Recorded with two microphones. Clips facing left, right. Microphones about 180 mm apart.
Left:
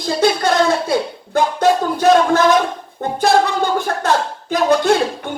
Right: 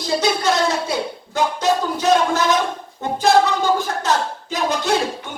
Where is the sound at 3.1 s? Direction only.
55° left (ahead or behind).